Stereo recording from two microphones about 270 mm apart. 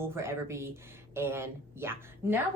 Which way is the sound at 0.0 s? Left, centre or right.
Centre.